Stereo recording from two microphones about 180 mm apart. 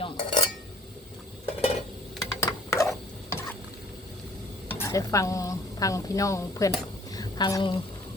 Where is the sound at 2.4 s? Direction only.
20° left (ahead or behind).